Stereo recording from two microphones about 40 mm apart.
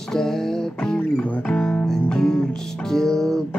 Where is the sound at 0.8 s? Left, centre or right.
Left.